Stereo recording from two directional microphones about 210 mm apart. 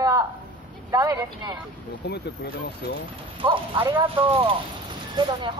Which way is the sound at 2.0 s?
55° left (ahead or behind).